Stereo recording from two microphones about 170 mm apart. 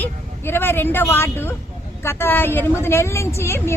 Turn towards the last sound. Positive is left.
turn(degrees=15)  # may be behind; listen again after turning